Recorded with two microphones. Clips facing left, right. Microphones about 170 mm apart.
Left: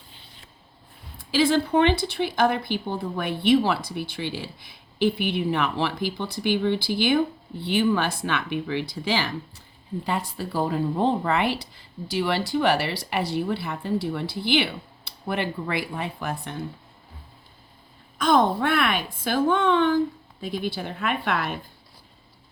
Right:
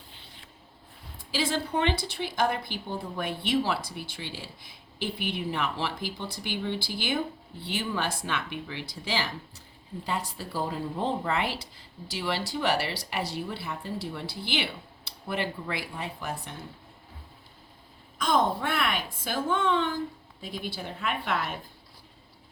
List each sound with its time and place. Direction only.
1.3 s speech: 60° left (ahead or behind)
18.2 s speech: 60° left (ahead or behind)